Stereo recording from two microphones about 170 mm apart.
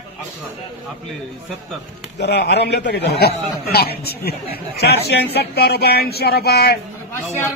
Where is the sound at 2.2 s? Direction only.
80° left.